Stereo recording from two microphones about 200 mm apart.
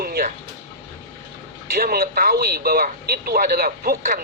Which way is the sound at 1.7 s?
45° right (ahead or behind).